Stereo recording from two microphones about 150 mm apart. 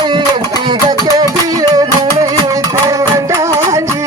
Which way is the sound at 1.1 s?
25° right (ahead or behind).